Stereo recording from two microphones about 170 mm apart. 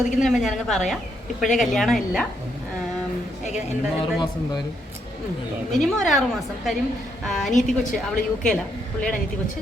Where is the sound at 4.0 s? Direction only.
25° left (ahead or behind).